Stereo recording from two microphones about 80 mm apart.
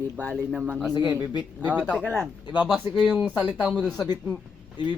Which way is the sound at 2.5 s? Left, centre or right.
Left.